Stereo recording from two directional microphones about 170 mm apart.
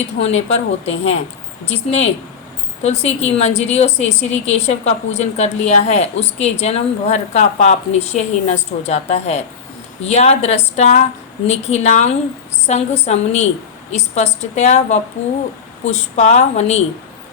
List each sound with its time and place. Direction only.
0.0 s a woman's voice: 40° left (ahead or behind)
2.8 s a woman's voice: 40° left (ahead or behind)